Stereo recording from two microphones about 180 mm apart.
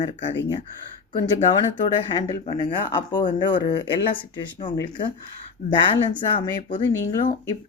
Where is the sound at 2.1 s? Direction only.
25° left (ahead or behind).